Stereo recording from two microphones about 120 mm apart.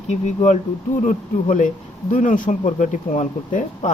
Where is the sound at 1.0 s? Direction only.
90° left.